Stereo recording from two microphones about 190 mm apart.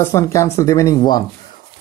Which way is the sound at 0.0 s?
15° left (ahead or behind).